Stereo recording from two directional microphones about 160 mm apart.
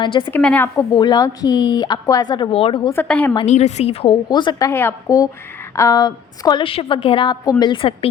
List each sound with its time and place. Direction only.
0.0 s speech: 30° left (ahead or behind)
0.3 s speech: 10° left (ahead or behind)
0.9 s speech: 25° left (ahead or behind)
2.9 s speech: 10° left (ahead or behind)
3.4 s a woman's voice: 45° left (ahead or behind); by 4.7 s 30° left (ahead or behind)
4.7 s a woman's voice: 15° left (ahead or behind); by 7.9 s 30° left (ahead or behind)